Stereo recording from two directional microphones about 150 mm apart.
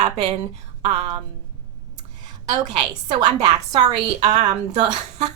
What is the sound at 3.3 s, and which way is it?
A woman's voice, 45° right (ahead or behind).